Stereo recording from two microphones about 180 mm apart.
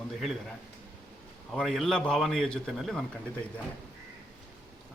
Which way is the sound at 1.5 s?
Centre (ahead or behind).